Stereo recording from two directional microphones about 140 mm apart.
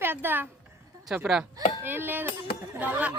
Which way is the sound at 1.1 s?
5° right (ahead or behind).